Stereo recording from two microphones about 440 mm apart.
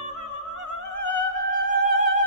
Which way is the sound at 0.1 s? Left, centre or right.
Left.